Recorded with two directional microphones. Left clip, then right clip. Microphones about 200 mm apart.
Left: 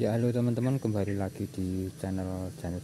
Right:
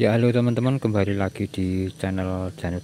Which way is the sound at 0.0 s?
10° right (ahead or behind).